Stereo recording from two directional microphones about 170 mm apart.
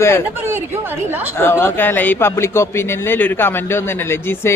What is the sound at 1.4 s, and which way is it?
Speech, 15° left (ahead or behind).